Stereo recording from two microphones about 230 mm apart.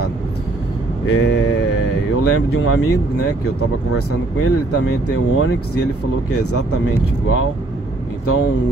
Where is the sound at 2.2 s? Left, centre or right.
Left.